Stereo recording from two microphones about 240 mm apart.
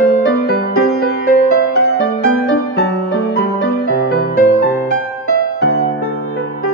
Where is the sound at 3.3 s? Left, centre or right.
Left.